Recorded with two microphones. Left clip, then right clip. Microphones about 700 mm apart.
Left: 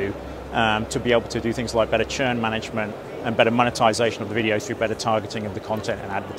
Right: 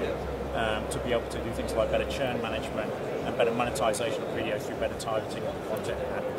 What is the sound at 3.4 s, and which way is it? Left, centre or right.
Speech, left.